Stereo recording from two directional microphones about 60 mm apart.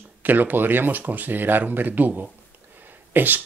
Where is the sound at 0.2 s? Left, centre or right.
Right.